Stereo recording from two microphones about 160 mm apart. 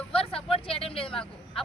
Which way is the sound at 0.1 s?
35° left (ahead or behind).